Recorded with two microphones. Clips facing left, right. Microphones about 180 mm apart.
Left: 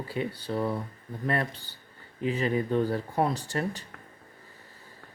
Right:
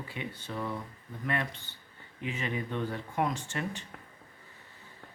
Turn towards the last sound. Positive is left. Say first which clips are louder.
# left 5 dB
turn(degrees=40)  # may be behind; listen again after turning